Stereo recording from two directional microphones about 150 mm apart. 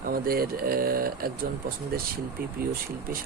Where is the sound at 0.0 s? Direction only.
80° right.